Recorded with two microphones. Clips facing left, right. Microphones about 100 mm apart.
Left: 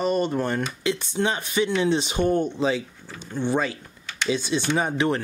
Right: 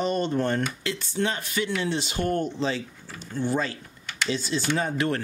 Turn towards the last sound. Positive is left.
turn(degrees=20)  # may be behind; listen again after turning